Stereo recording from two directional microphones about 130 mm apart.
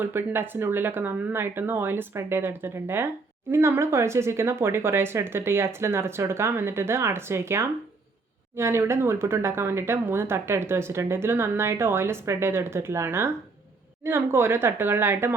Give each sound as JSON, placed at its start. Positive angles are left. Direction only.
{"t": 0.0, "sound": "speech", "side_deg": -15}